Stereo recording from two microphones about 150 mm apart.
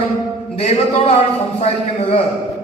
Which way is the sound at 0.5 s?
45° left (ahead or behind).